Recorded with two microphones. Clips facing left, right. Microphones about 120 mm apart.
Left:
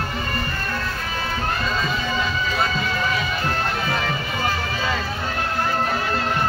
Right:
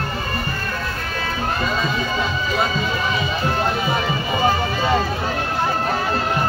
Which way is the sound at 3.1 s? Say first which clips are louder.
Right 3 dB; 15° right (ahead or behind).